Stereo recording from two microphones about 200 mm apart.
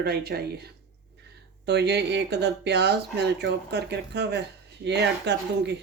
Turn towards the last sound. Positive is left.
turn(degrees=-60)  # may be behind; listen again after turning